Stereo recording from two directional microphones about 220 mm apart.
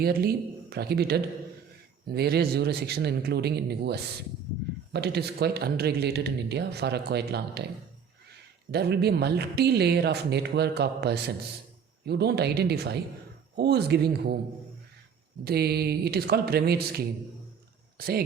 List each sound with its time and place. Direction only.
0.0 s speech: 45° right (ahead or behind)
8.7 s speech: 45° right (ahead or behind)
15.4 s speech: 45° right (ahead or behind)
17.9 s a sound: 45° right (ahead or behind)